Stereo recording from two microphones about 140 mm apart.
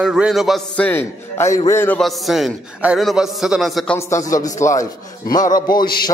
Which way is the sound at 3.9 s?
25° left (ahead or behind).